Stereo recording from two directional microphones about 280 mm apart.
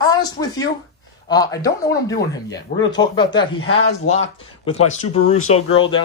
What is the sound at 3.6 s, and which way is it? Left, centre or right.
Speech, left.